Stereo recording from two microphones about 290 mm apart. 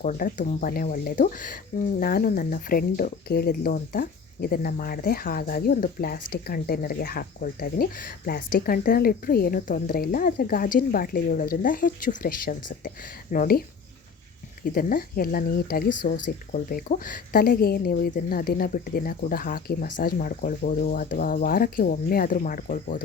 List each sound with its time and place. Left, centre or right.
0.0 s speech: left
14.6 s speech: left